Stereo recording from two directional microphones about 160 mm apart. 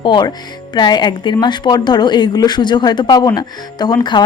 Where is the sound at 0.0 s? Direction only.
30° left (ahead or behind).